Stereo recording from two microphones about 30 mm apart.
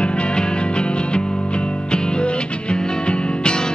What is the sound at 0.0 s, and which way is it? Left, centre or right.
Music, left.